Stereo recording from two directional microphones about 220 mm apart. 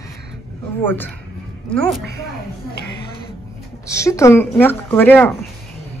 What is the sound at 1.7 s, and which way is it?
Speech, 5° left (ahead or behind).